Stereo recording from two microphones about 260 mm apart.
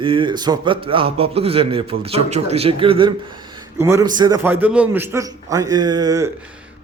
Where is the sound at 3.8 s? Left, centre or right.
Centre.